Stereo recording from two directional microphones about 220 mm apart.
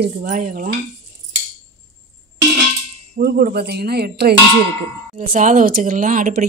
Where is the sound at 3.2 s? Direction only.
45° right (ahead or behind).